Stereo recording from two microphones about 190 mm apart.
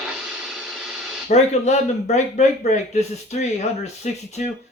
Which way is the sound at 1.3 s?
35° left (ahead or behind).